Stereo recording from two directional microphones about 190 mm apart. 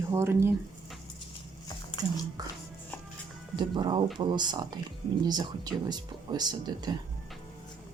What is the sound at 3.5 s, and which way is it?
Speech, 25° right (ahead or behind).